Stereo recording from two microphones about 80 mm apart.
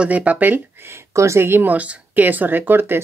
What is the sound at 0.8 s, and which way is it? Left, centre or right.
Speech, right.